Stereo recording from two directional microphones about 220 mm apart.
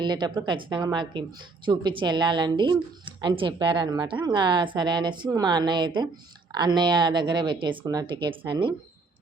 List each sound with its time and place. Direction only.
0.0 s a woman's voice: 20° right (ahead or behind)